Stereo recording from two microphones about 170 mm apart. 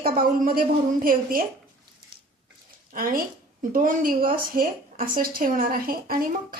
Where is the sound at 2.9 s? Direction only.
55° right (ahead or behind).